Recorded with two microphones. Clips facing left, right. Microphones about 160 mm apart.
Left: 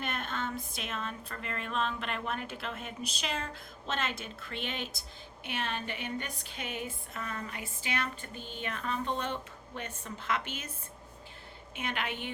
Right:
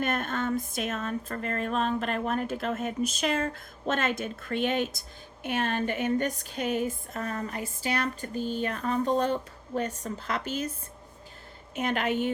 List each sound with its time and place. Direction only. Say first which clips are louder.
0.0 s music: right 7 dB; 50° right (ahead or behind)
11.7 s music: right 9 dB; 40° right (ahead or behind)